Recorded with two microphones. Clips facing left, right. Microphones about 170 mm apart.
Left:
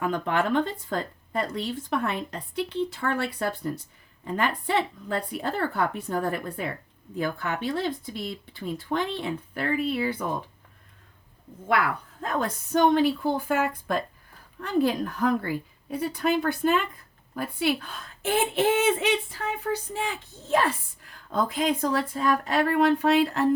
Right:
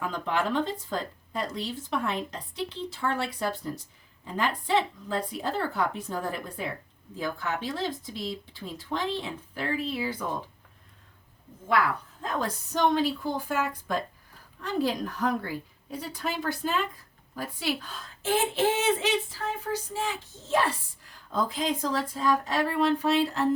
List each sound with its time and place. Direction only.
0.0 s speech: 60° left (ahead or behind)
12.2 s speech: 55° left (ahead or behind)